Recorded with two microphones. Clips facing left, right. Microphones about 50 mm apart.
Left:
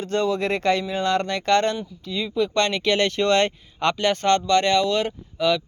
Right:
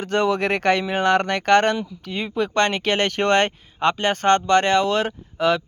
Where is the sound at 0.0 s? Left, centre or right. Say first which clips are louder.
Right 2 dB; right.